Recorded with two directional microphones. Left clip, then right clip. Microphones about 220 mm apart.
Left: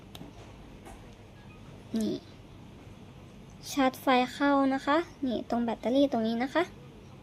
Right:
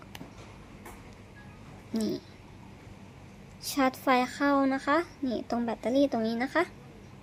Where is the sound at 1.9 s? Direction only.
Centre (ahead or behind).